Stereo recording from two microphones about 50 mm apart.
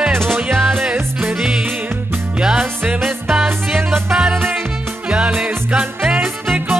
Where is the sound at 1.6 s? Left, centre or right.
Right.